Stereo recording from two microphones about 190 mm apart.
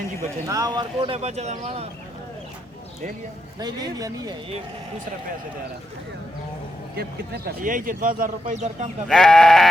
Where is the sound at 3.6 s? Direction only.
20° right (ahead or behind).